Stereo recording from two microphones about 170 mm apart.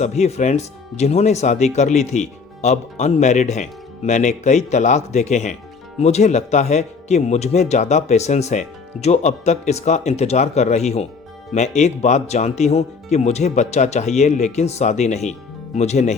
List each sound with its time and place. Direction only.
0.0 s speech: 40° left (ahead or behind)